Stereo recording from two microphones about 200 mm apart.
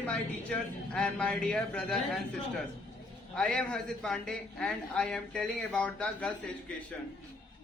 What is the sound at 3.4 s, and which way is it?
A man's voice, 5° left (ahead or behind).